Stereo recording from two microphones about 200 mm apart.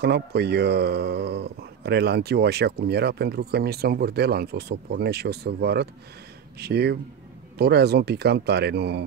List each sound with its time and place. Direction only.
0.0 s speech: 55° right (ahead or behind)